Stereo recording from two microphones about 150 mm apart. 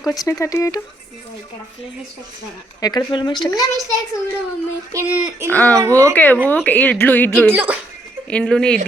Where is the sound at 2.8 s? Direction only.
30° left (ahead or behind).